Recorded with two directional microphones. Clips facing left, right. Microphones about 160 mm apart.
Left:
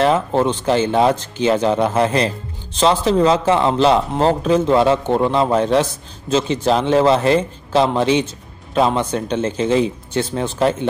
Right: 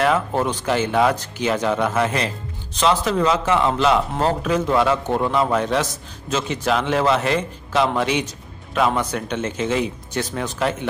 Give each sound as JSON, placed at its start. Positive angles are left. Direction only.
{"t": 0.0, "sound": "speech", "side_deg": 30}